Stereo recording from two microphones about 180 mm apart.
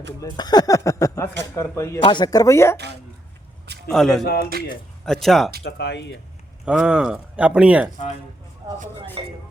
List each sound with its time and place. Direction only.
0.2 s speech: 20° left (ahead or behind)
3.8 s speech: centre (ahead or behind)
5.6 s speech: 65° left (ahead or behind)
6.7 s speech: 5° right (ahead or behind)
9.2 s speech: 30° right (ahead or behind)